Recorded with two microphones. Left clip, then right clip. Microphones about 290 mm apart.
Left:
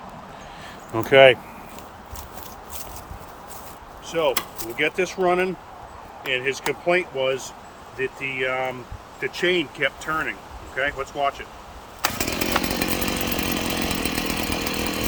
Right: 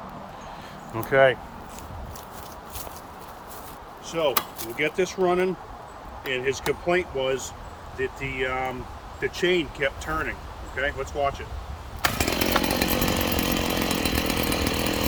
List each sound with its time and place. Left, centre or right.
0.9 s speech: left
4.1 s speech: centre
12.0 s chainsaw: centre